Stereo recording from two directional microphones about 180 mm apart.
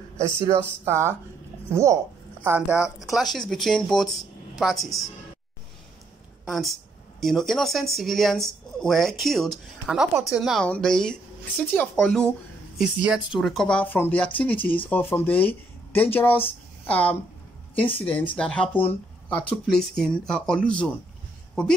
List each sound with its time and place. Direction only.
0.4 s speech: 15° right (ahead or behind)
6.4 s speech: centre (ahead or behind)
14.6 s speech: 30° left (ahead or behind)
14.9 s speech: 10° left (ahead or behind)